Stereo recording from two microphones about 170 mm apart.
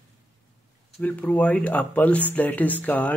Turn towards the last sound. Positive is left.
turn(degrees=10)  # may be behind; listen again after turning